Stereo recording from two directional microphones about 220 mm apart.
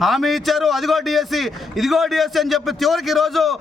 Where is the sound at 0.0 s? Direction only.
Centre (ahead or behind).